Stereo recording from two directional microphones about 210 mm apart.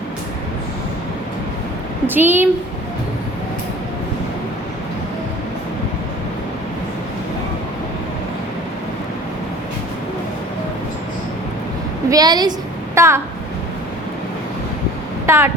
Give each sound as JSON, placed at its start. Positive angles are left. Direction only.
{"t": 2.0, "sound": "a woman's voice", "side_deg": -10}
{"t": 12.1, "sound": "a woman's voice", "side_deg": -20}
{"t": 15.3, "sound": "speech", "side_deg": -10}